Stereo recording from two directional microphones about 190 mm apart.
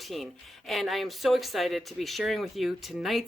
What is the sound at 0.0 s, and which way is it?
Speech, centre (ahead or behind).